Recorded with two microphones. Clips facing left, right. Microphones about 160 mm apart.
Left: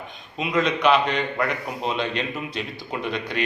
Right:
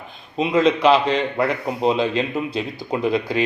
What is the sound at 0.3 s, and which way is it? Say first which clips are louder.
A man's voice: right 6 dB; 30° right (ahead or behind).